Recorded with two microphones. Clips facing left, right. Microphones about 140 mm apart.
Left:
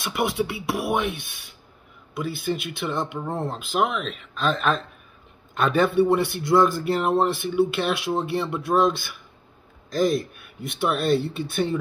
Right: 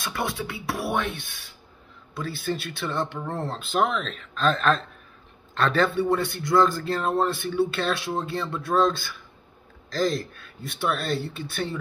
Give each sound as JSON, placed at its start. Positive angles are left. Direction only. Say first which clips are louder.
{"t": 0.0, "sound": "a man's voice", "louder": "left 5 dB", "side_deg": 20}
{"t": 5.9, "sound": "a man's voice", "louder": "left 4 dB", "side_deg": 20}